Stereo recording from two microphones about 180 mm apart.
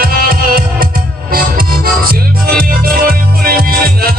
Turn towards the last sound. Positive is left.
turn(degrees=-55)  # may be behind; listen again after turning